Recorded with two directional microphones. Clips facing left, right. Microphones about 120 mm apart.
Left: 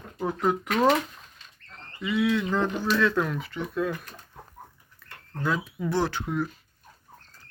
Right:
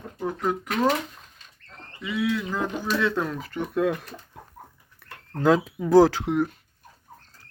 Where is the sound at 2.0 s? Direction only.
Centre (ahead or behind).